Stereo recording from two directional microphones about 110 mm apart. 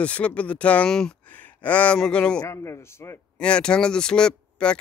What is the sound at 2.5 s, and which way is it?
Speech, 25° left (ahead or behind).